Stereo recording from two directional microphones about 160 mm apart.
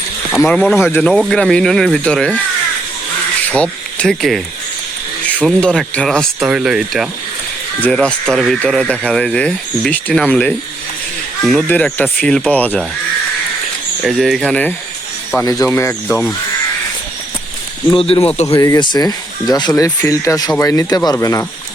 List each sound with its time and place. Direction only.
0.3 s speech: 5° left (ahead or behind)
3.4 s a sound: 10° left (ahead or behind)
5.2 s speech: 5° left (ahead or behind)
14.0 s speech: centre (ahead or behind)
15.4 s speech: 20° left (ahead or behind)
17.9 s speech: 35° left (ahead or behind)
18.4 s speech: 20° left (ahead or behind)